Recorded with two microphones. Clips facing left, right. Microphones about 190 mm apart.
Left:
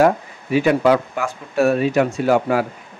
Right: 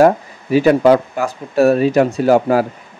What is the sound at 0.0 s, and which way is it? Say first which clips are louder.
Speech: right 4 dB; 40° right (ahead or behind).